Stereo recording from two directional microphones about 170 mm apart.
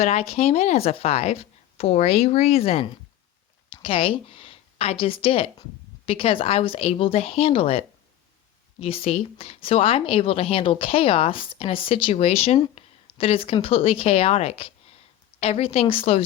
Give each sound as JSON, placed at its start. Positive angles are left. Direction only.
{"t": 0.0, "sound": "a woman's voice", "side_deg": 40}